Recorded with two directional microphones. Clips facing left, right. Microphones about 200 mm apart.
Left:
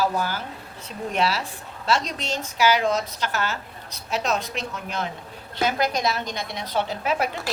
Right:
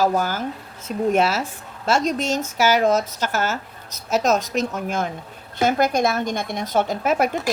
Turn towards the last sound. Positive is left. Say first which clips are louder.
# right 5 dB
turn(degrees=-45)  # may be behind; listen again after turning